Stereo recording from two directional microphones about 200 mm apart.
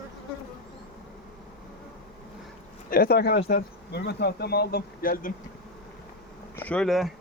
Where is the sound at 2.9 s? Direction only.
50° left (ahead or behind).